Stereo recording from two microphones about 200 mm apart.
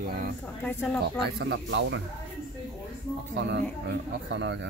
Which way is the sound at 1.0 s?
55° right (ahead or behind).